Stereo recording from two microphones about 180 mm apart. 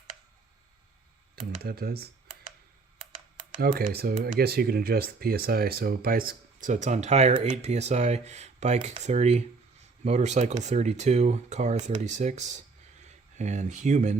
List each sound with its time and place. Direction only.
1.6 s speech: 60° right (ahead or behind)
3.6 s speech: 60° right (ahead or behind); by 14.2 s 40° right (ahead or behind)